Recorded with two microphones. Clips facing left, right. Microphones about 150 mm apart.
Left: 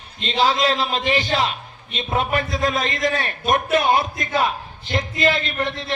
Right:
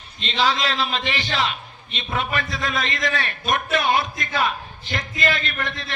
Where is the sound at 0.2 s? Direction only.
40° left (ahead or behind).